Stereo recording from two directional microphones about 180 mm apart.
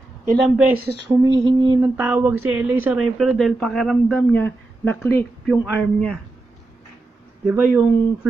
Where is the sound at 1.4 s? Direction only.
25° right (ahead or behind).